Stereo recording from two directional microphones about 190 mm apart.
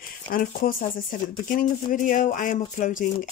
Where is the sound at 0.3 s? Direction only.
50° left (ahead or behind).